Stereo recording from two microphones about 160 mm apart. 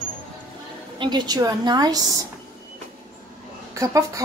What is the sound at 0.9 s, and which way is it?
Speech, 30° right (ahead or behind).